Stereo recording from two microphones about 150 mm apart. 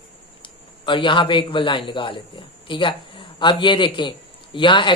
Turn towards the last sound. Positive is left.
turn(degrees=35)  # may be behind; listen again after turning